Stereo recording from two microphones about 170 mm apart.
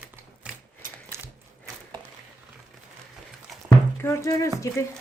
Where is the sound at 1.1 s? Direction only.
15° right (ahead or behind).